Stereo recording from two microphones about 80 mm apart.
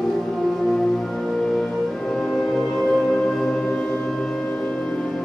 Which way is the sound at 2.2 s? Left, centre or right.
Centre.